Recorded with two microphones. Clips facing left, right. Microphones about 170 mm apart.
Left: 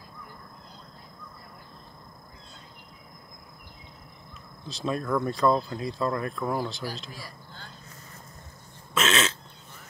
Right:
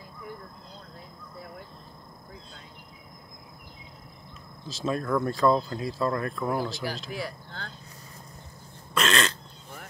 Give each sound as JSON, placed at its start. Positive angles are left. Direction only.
{"t": 4.6, "sound": "speech", "side_deg": 0}
{"t": 7.1, "sound": "speech", "side_deg": -70}
{"t": 8.9, "sound": "a sound", "side_deg": 5}